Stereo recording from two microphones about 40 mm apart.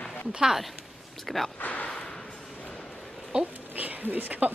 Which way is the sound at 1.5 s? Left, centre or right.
Left.